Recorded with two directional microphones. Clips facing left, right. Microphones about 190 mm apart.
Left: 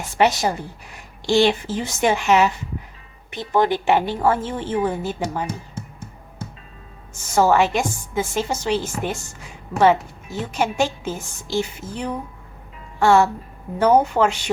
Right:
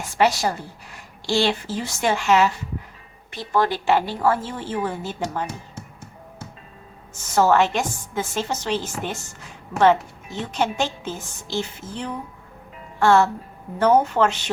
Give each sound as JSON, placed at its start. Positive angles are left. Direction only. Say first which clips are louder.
{"t": 0.2, "sound": "a woman's voice", "louder": "left 2 dB", "side_deg": 20}
{"t": 7.3, "sound": "a woman's voice", "louder": "left 1 dB", "side_deg": 10}